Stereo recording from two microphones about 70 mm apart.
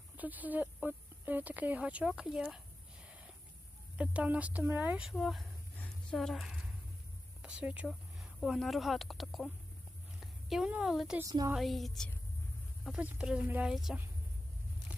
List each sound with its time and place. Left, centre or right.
0.2 s speech: right
2.2 s a sound: centre
3.9 s speech: centre
5.0 s speech: centre
5.7 s a sound: centre
6.1 s speech: centre
7.4 s speech: centre
7.9 s a sound: centre
8.5 s speech: centre
10.1 s a sound: centre
10.8 s speech: centre
13.0 s speech: centre